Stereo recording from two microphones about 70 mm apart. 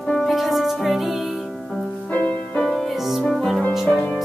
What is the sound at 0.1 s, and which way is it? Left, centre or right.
Music, centre.